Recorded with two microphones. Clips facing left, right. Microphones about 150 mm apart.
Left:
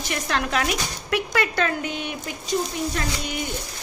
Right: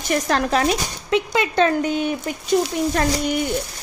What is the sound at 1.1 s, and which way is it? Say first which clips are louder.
Speech: right 5 dB; 20° right (ahead or behind).